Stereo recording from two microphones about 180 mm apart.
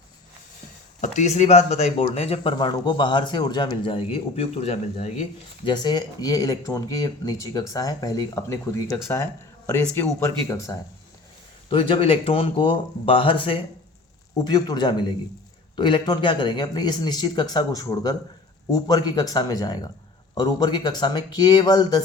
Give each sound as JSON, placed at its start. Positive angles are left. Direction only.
{"t": 1.0, "sound": "speech", "side_deg": 40}
{"t": 5.6, "sound": "speech", "side_deg": 25}
{"t": 11.7, "sound": "speech", "side_deg": 30}